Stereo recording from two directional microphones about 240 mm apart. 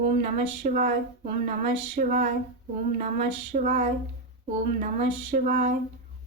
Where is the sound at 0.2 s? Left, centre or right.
Right.